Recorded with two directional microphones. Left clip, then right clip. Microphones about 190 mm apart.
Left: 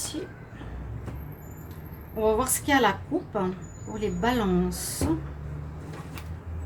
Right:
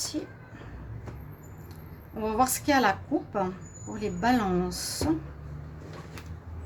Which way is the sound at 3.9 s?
50° right (ahead or behind).